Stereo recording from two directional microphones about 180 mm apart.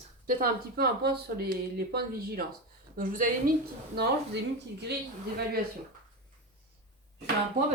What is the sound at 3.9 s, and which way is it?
Speech, 65° right (ahead or behind).